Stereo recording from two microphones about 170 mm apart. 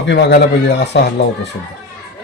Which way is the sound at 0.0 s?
85° left.